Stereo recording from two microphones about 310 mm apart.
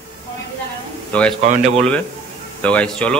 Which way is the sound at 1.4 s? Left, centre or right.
Right.